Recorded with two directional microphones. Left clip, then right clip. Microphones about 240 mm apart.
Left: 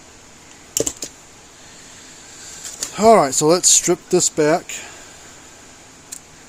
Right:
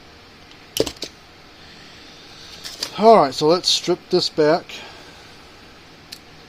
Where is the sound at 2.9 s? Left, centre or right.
Centre.